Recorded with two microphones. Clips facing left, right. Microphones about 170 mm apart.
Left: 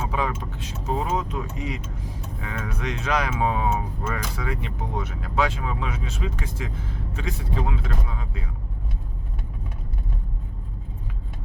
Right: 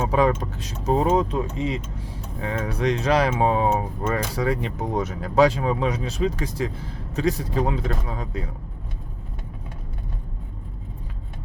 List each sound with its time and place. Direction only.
0.1 s speech: 40° right (ahead or behind)